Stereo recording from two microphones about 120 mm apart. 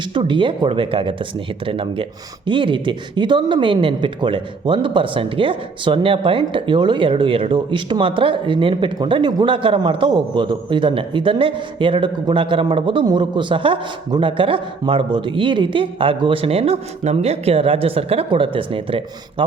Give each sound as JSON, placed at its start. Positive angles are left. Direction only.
{"t": 0.1, "sound": "speech", "side_deg": -45}